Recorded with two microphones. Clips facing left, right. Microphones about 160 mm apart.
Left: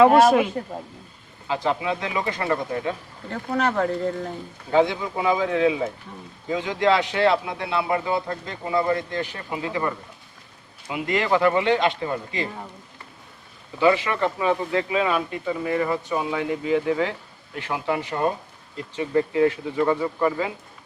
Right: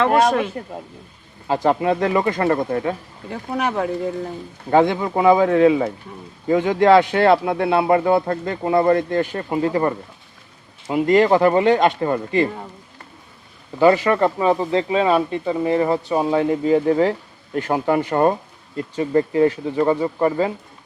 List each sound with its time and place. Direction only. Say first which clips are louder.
0.0 s speech: left 2 dB; 5° left (ahead or behind)
1.5 s speech: right 6 dB; 45° right (ahead or behind)
3.2 s speech: right 1 dB; 10° right (ahead or behind)
4.7 s speech: right 4 dB; 55° right (ahead or behind)
13.7 s speech: right 5 dB; 45° right (ahead or behind)
18.9 s speech: right 4 dB; 40° right (ahead or behind)